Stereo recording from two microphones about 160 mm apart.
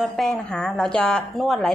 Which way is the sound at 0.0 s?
Centre (ahead or behind).